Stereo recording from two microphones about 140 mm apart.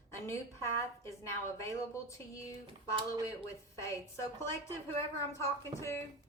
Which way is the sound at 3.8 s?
20° left (ahead or behind).